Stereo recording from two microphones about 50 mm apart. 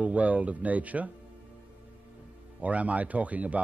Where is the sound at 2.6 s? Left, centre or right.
Right.